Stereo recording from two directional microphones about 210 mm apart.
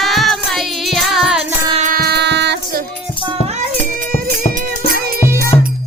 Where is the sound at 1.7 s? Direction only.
40° right (ahead or behind).